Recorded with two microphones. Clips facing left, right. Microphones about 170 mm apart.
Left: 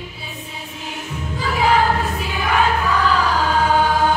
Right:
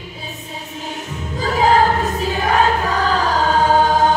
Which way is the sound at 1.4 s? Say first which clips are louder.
Right 3 dB; 40° right (ahead or behind).